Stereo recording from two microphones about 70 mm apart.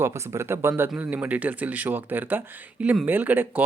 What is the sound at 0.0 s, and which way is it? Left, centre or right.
Speech, right.